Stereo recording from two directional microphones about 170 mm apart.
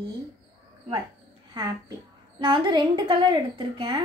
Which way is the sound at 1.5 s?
25° right (ahead or behind).